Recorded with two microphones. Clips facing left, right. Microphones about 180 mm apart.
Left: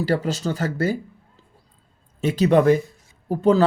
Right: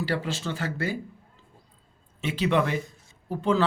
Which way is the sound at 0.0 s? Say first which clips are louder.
Left 7 dB; 40° left (ahead or behind).